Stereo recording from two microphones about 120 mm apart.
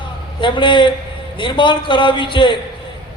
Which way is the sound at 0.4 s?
40° left (ahead or behind).